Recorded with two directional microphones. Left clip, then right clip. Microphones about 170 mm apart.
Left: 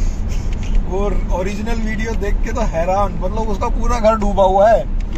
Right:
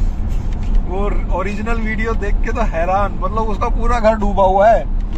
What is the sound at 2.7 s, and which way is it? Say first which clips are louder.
Speech: left 1 dB; 20° left (ahead or behind).